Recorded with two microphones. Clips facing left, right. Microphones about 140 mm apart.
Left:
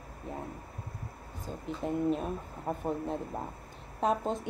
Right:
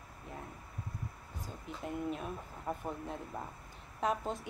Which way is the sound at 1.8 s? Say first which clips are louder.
Left 8 dB; 30° left (ahead or behind).